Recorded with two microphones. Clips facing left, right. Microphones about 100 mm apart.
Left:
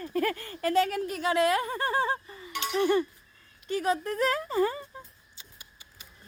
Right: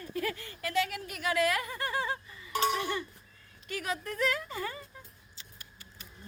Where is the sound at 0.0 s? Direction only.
50° left (ahead or behind).